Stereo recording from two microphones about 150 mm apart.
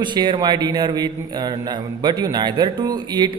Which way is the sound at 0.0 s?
30° right (ahead or behind).